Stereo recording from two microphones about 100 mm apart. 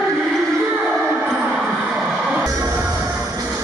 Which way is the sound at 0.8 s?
5° right (ahead or behind).